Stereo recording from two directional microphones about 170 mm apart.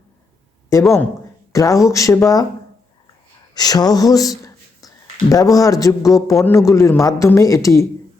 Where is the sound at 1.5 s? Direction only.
20° left (ahead or behind).